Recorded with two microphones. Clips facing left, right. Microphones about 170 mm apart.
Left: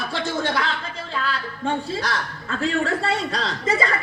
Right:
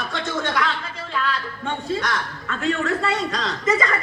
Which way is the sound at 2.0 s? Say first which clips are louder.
Right 1 dB; 30° left (ahead or behind).